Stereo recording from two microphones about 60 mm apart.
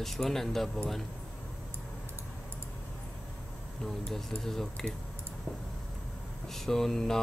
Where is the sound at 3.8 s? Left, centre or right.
Centre.